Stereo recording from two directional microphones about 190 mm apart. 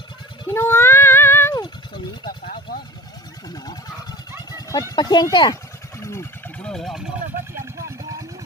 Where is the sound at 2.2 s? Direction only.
50° left (ahead or behind).